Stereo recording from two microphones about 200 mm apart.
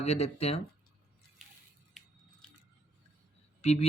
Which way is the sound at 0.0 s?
35° left (ahead or behind).